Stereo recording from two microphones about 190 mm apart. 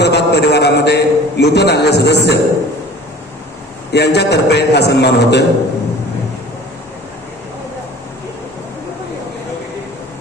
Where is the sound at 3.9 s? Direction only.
60° left (ahead or behind).